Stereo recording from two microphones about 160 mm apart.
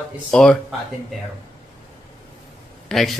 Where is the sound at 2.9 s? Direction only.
Centre (ahead or behind).